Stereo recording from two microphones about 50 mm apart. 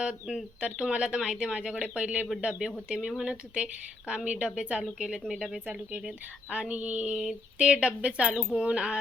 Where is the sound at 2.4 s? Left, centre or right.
Centre.